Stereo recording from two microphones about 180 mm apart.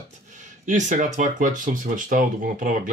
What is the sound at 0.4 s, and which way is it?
Speech, 45° right (ahead or behind).